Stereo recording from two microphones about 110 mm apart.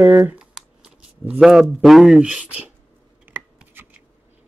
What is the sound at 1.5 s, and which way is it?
Speech, centre (ahead or behind).